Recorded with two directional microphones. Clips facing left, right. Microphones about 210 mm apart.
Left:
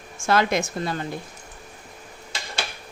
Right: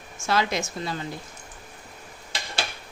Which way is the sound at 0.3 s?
55° left (ahead or behind).